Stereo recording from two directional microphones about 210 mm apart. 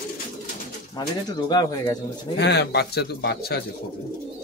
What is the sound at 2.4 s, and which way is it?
Speech, 55° left (ahead or behind).